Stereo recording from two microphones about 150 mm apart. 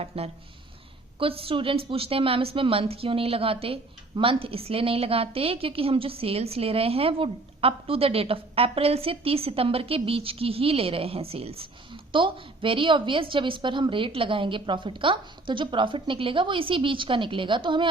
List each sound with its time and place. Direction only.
0.1 s a woman's voice: 40° right (ahead or behind)